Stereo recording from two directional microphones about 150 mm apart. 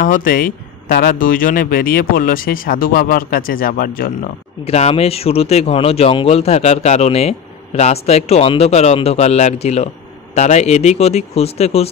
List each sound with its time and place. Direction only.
0.0 s speech: 65° left (ahead or behind)
4.6 s speech: 45° left (ahead or behind)